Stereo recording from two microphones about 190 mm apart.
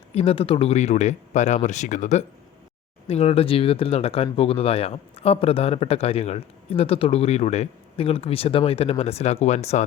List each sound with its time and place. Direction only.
0.1 s speech: 30° left (ahead or behind)